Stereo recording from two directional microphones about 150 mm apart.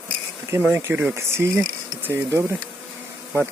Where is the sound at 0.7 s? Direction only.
15° right (ahead or behind).